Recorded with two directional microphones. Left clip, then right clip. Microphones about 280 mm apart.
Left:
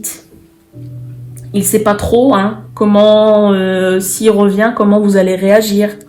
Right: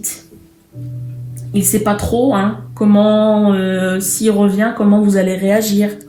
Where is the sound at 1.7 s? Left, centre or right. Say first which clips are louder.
Left 6 dB; left.